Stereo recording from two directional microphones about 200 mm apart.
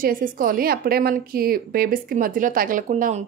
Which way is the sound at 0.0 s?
45° right (ahead or behind).